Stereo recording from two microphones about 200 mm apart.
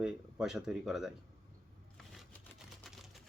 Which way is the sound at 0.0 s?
5° right (ahead or behind).